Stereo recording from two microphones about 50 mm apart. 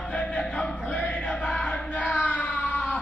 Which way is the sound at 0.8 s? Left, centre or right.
Left.